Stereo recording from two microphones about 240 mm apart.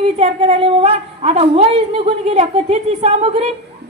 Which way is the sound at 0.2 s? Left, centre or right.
Right.